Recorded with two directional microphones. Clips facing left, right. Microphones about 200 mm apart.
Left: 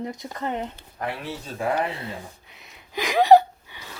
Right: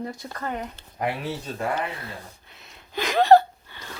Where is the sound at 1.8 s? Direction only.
25° left (ahead or behind).